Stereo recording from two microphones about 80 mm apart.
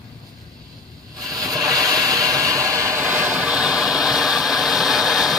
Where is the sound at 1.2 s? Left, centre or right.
Right.